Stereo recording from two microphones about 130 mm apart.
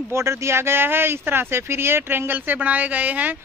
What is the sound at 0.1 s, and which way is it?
Speech, 20° right (ahead or behind).